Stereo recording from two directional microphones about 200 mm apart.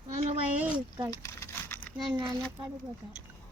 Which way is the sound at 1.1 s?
15° left (ahead or behind).